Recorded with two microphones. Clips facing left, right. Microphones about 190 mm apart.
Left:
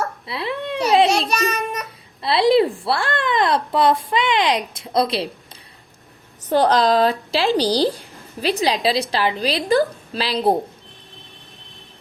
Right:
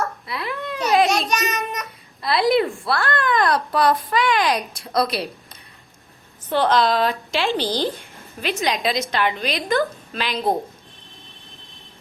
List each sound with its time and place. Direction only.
0.3 s a sound: 30° left (ahead or behind)
1.5 s child singing: 10° left (ahead or behind)
2.2 s speech: 30° left (ahead or behind)
6.5 s a woman's voice: 40° left (ahead or behind)